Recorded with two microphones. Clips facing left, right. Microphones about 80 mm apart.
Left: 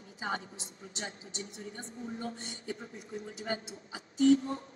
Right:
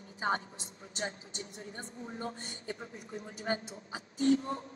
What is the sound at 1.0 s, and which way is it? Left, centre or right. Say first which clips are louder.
Speech: right 3 dB; right.